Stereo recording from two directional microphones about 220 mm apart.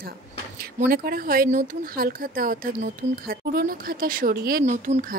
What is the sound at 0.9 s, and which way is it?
Speech, 40° right (ahead or behind).